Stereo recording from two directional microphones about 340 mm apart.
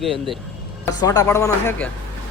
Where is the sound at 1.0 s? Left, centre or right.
Centre.